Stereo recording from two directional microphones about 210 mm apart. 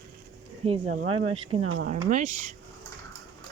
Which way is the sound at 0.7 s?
30° right (ahead or behind).